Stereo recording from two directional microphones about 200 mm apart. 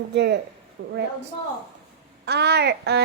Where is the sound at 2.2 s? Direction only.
55° right (ahead or behind).